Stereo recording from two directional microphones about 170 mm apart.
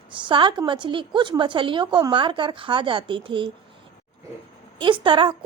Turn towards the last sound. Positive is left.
turn(degrees=-30)  # may be behind; listen again after turning